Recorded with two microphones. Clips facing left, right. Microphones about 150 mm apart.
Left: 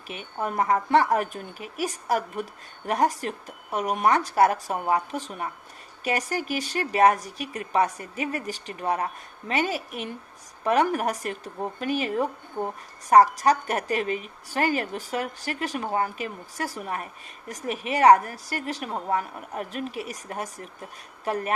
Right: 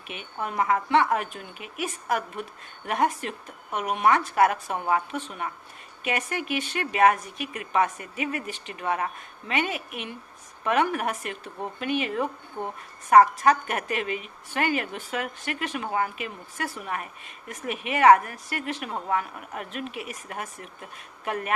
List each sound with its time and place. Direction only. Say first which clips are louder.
0.1 s a woman's voice: left 3 dB; 35° left (ahead or behind)